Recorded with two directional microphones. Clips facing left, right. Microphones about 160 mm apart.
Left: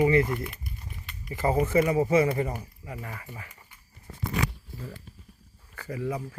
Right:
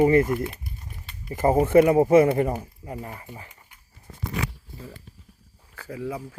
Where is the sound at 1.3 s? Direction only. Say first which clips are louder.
Right 6 dB; 45° right (ahead or behind).